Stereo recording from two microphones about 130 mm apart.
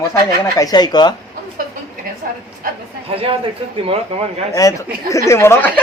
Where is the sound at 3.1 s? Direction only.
45° right (ahead or behind).